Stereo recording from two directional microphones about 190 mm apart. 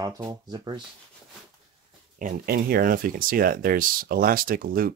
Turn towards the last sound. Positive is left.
turn(degrees=-50)  # may be behind; listen again after turning